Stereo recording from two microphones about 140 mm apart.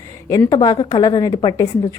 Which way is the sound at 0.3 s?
25° left (ahead or behind).